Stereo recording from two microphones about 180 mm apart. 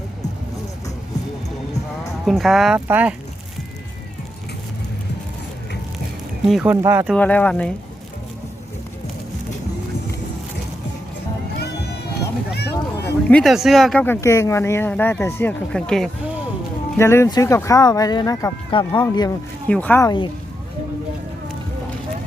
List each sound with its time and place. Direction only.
2.2 s speech: centre (ahead or behind)
6.4 s speech: 5° right (ahead or behind)
6.8 s speech: 15° right (ahead or behind)
7.1 s speech: 10° left (ahead or behind)
12.5 s a sound: 65° left (ahead or behind)
13.2 s speech: 5° left (ahead or behind); by 19.0 s 25° left (ahead or behind)
19.6 s speech: 10° left (ahead or behind)